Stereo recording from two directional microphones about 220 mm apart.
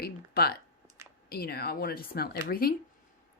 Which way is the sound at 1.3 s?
45° left (ahead or behind).